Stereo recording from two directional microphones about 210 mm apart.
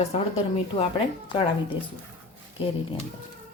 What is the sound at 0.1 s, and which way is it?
Speech, 30° left (ahead or behind).